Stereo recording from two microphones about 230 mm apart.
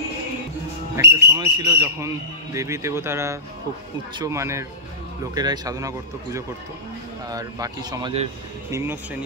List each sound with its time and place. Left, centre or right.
1.0 s speech: centre